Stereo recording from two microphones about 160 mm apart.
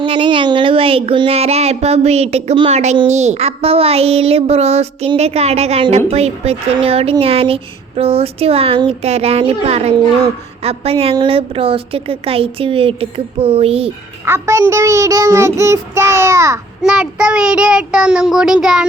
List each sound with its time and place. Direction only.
0.0 s child singing: 30° right (ahead or behind)
14.3 s child singing: 15° right (ahead or behind)
16.8 s a child's voice: 5° right (ahead or behind)